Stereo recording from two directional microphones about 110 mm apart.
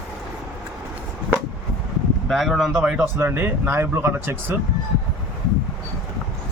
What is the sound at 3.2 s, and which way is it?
Speech, 20° right (ahead or behind).